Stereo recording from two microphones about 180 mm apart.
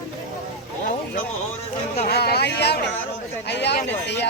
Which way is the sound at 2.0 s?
65° left (ahead or behind).